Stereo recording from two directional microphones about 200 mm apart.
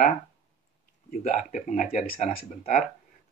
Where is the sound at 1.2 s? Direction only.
40° left (ahead or behind).